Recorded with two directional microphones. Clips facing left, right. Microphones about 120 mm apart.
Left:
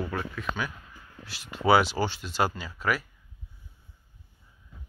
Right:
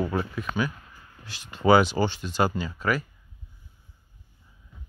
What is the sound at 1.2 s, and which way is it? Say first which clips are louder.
Speech: right 3 dB; 5° left (ahead or behind).